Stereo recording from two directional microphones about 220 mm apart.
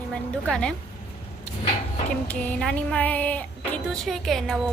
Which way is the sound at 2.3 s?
5° left (ahead or behind).